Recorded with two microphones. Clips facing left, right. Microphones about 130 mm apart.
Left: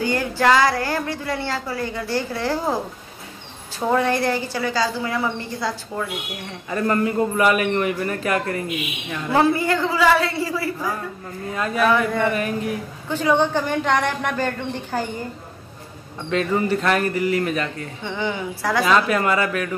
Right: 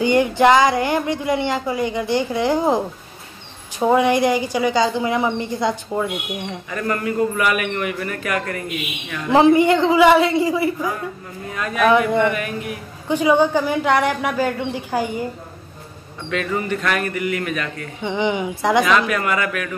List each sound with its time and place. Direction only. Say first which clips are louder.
0.0 s a woman's voice: right 5 dB; 20° right (ahead or behind)
3.8 s a woman's voice: right 4 dB; 15° right (ahead or behind)
6.7 s a man's voice: left 3 dB; 30° left (ahead or behind)
9.3 s a woman's voice: right 6 dB; 20° right (ahead or behind)
11.5 s a man's voice: left 2 dB; 30° left (ahead or behind)
11.8 s a woman's voice: right 4 dB; 15° right (ahead or behind)
12.3 s speech: even; 30° left (ahead or behind)
13.1 s a woman's voice: right 3 dB; 10° right (ahead or behind)
16.3 s speech: left 2 dB; 30° left (ahead or behind)
18.0 s a woman's voice: right 5 dB; 20° right (ahead or behind)
18.9 s speech: even; 30° left (ahead or behind)